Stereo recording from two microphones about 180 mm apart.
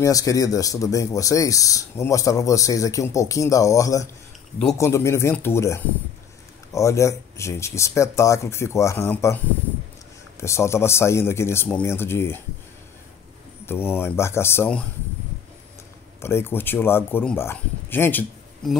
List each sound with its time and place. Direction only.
0.0 s speech: 20° left (ahead or behind)
10.4 s speech: 15° left (ahead or behind)
13.7 s speech: 10° left (ahead or behind)
16.2 s speech: 15° left (ahead or behind)